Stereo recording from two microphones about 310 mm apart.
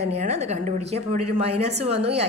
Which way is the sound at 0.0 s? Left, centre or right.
Right.